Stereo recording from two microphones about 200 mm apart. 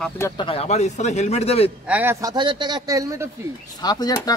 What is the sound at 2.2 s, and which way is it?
Speech, 20° right (ahead or behind).